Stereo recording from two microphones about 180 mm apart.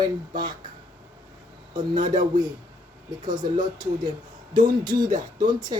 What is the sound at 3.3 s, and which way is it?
A woman's voice, 25° right (ahead or behind).